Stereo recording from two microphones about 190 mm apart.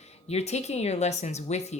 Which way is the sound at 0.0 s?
35° left (ahead or behind).